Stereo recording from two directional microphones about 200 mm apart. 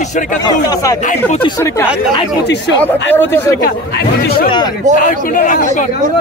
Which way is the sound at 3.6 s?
50° left (ahead or behind).